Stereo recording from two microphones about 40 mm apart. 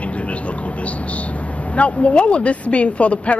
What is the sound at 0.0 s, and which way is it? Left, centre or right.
Speech, left.